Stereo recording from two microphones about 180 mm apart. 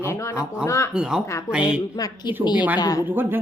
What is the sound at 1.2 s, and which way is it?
Speech, 15° left (ahead or behind).